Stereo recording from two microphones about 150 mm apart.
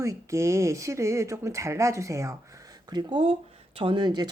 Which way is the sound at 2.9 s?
35° right (ahead or behind).